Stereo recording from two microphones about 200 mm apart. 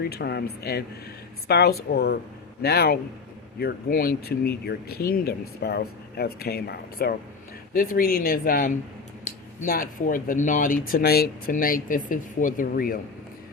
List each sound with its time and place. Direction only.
0.0 s speech: 55° left (ahead or behind)